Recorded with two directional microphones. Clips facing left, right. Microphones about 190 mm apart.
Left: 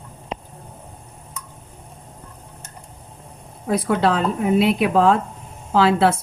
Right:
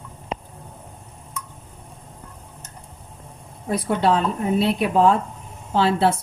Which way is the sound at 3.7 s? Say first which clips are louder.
Left 1 dB; 90° left.